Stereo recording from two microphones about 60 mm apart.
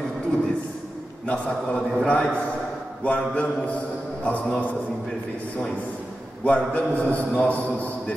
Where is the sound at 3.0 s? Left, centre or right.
Left.